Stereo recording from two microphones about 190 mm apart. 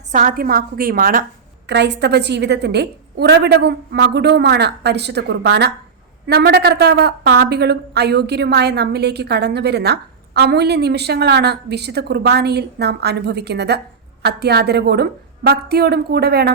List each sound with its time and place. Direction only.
0.1 s a woman's voice: 45° right (ahead or behind)
1.6 s a woman's voice: 65° right (ahead or behind)